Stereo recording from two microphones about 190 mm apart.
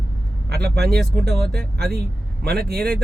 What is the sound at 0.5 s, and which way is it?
Speech, 60° right (ahead or behind).